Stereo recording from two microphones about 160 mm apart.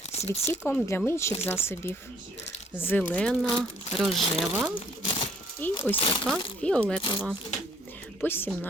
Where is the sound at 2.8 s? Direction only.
10° left (ahead or behind).